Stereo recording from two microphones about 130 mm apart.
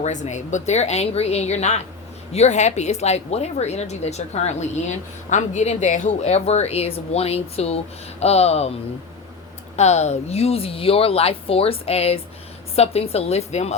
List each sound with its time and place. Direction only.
0.0 s a woman's voice: 65° left (ahead or behind)
9.7 s speech: 60° left (ahead or behind)